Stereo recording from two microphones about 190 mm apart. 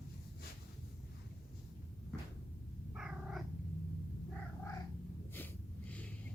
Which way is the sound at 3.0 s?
5° right (ahead or behind).